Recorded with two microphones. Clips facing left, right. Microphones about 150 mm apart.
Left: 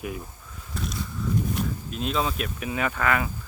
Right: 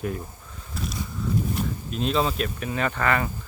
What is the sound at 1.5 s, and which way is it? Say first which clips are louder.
Speech: right 1 dB; centre (ahead or behind).